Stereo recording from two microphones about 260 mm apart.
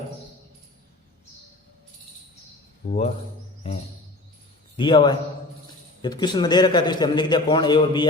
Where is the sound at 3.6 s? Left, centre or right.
Left.